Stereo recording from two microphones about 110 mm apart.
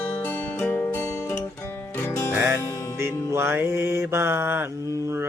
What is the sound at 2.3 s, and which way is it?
Music, 25° right (ahead or behind).